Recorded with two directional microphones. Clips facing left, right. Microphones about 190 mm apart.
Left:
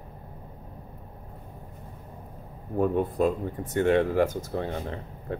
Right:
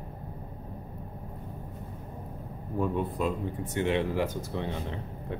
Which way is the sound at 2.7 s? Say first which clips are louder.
Left 5 dB; 50° left (ahead or behind).